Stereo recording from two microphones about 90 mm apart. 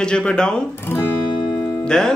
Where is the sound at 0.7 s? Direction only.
25° left (ahead or behind).